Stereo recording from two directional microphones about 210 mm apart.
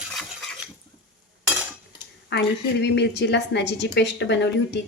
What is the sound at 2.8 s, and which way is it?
A woman's voice, 55° left (ahead or behind).